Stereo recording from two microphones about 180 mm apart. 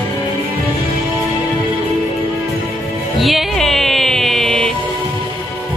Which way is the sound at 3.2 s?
Centre (ahead or behind).